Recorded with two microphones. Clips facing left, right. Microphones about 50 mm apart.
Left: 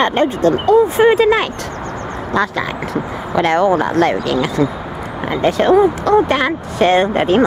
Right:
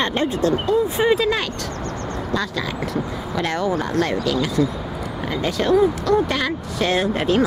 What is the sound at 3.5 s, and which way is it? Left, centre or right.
Speech, left.